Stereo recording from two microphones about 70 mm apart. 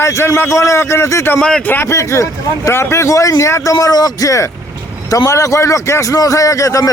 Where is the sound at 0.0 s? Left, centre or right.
Left.